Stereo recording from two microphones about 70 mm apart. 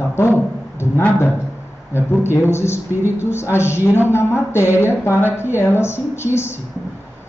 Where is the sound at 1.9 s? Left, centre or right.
Left.